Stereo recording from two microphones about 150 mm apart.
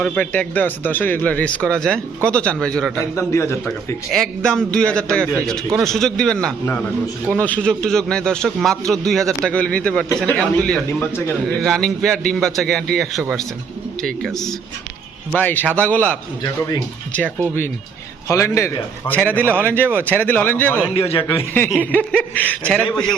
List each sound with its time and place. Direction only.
0.0 s speech: 5° left (ahead or behind)
3.2 s speech: 15° left (ahead or behind)
4.1 s a man's voice: 5° left (ahead or behind)
18.3 s speech: 20° left (ahead or behind)
19.5 s speech: 15° right (ahead or behind)
20.1 s speech: 10° left (ahead or behind)
20.9 s a man's voice: 40° left (ahead or behind)
21.8 s speech: 10° left (ahead or behind)